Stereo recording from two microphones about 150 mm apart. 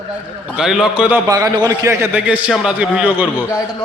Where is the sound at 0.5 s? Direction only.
5° right (ahead or behind).